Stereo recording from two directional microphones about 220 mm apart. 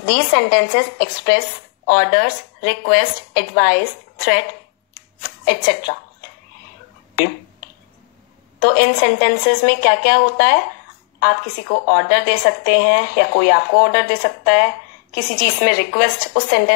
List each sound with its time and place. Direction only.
0.0 s a woman's voice: 40° left (ahead or behind)
7.2 s a sound: 45° left (ahead or behind)
8.5 s a woman's voice: 45° left (ahead or behind)